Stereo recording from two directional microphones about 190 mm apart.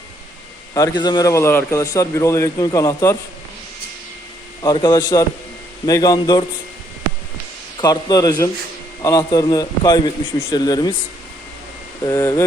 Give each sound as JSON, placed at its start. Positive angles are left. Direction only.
{"t": 0.7, "sound": "a man's voice", "side_deg": 20}
{"t": 4.6, "sound": "a man's voice", "side_deg": 20}
{"t": 7.8, "sound": "a man's voice", "side_deg": 20}
{"t": 12.0, "sound": "a man's voice", "side_deg": 20}